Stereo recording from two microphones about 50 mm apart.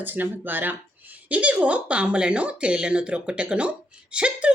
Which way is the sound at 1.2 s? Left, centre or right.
Right.